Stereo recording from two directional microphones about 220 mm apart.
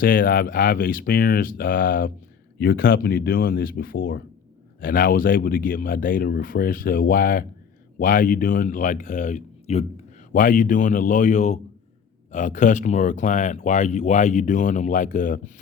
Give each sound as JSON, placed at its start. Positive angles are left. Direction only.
{"t": 0.0, "sound": "speech", "side_deg": 40}